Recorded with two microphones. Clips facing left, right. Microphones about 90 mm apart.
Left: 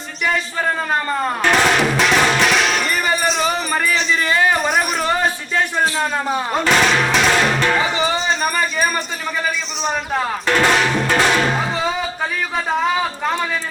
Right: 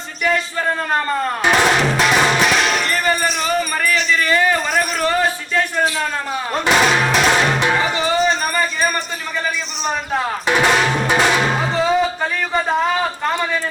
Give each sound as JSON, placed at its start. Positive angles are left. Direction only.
{"t": 1.5, "sound": "drum", "side_deg": -5}
{"t": 3.9, "sound": "a sound", "side_deg": 20}
{"t": 6.7, "sound": "music", "side_deg": -5}
{"t": 10.4, "sound": "drum", "side_deg": -10}